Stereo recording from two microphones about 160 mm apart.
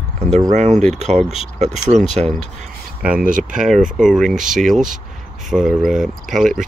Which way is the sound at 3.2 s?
55° right (ahead or behind).